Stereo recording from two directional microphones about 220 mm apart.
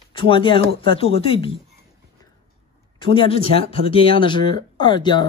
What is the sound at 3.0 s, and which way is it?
Speech, 25° left (ahead or behind).